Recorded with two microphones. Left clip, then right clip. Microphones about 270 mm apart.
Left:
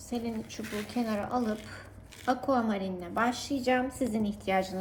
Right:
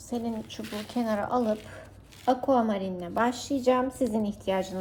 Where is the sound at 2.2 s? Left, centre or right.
Centre.